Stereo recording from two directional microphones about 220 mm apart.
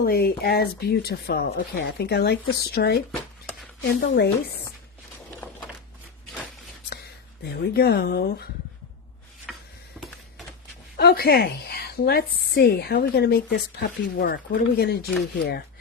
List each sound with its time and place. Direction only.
0.0 s a woman's voice: 45° left (ahead or behind)
4.0 s a woman's voice: 45° left (ahead or behind)
5.4 s a sound: 5° left (ahead or behind)
7.5 s a woman's voice: 45° left (ahead or behind)
10.9 s a woman's voice: 45° left (ahead or behind)